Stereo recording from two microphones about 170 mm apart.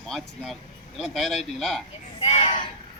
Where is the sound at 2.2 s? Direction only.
35° left (ahead or behind).